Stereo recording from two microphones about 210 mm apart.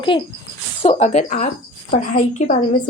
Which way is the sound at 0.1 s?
25° left (ahead or behind).